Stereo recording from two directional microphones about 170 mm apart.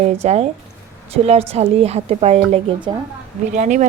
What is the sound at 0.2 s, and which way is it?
A woman's voice, 40° right (ahead or behind).